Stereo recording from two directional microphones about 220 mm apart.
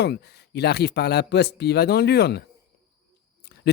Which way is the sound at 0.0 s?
50° left (ahead or behind).